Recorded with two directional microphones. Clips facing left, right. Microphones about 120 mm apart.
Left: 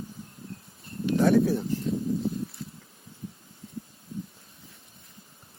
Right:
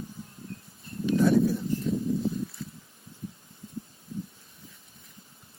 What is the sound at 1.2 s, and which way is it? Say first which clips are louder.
Speech: left 2 dB; 65° left (ahead or behind).